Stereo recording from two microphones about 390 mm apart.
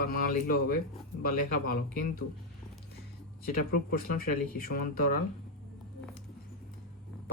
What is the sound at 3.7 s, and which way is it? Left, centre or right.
Speech, left.